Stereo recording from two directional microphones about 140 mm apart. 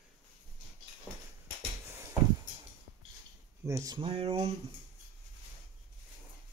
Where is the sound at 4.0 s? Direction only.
45° right (ahead or behind).